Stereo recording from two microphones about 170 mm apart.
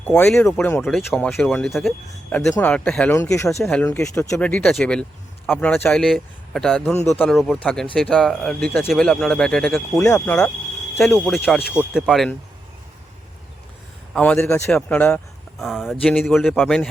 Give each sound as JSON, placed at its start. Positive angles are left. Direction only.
{"t": 0.1, "sound": "speech", "side_deg": 5}
{"t": 3.6, "sound": "speech", "side_deg": 5}
{"t": 9.9, "sound": "speech", "side_deg": 15}
{"t": 11.8, "sound": "speech", "side_deg": -5}
{"t": 14.1, "sound": "speech", "side_deg": 10}